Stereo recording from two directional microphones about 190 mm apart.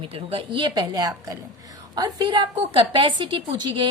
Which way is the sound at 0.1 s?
30° right (ahead or behind).